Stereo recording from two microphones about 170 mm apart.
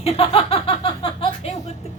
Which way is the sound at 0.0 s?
35° left (ahead or behind).